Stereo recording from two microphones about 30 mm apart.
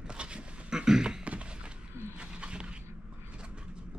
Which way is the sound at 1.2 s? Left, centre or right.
Right.